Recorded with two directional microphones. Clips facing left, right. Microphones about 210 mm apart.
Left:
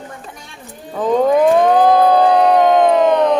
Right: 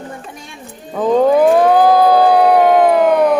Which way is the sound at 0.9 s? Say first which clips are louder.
Right 2 dB; 5° right (ahead or behind).